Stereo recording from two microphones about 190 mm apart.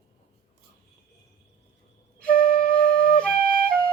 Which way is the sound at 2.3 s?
45° left (ahead or behind).